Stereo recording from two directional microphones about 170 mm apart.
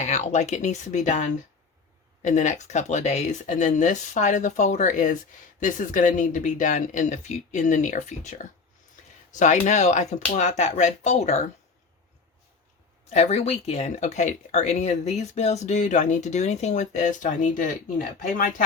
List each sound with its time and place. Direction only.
0.0 s speech: 40° left (ahead or behind)
13.1 s speech: 40° left (ahead or behind)